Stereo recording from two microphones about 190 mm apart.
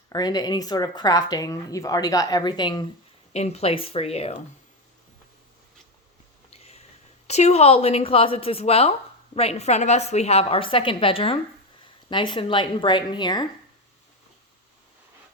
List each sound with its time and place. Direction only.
0.1 s speech: 20° left (ahead or behind)
3.3 s a woman's voice: 35° left (ahead or behind)
6.5 s a sound: 35° left (ahead or behind)
7.3 s a woman's voice: 35° left (ahead or behind)